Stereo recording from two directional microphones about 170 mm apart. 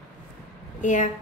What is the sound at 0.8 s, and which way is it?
Speech, 45° left (ahead or behind).